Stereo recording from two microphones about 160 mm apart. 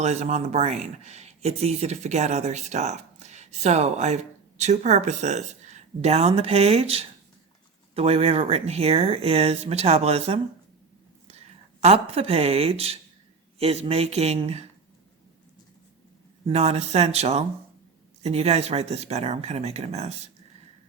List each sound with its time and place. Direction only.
0.0 s speech: 45° right (ahead or behind)
16.5 s speech: 40° right (ahead or behind)